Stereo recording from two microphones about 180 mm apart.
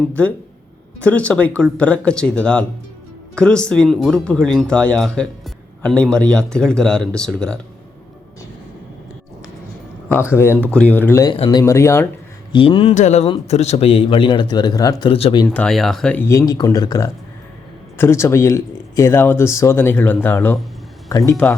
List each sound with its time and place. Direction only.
0.1 s speech: 10° left (ahead or behind)
10.1 s speech: 15° left (ahead or behind)
12.5 s a man's voice: 30° left (ahead or behind)
12.9 s a man's voice: 40° left (ahead or behind)
15.4 s speech: 5° left (ahead or behind)